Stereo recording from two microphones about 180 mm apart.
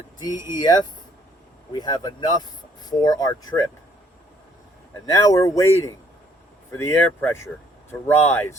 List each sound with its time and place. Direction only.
0.2 s speech: 25° left (ahead or behind)
5.0 s speech: 20° left (ahead or behind)